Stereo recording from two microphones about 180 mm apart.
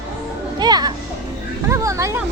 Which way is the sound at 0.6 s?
25° right (ahead or behind).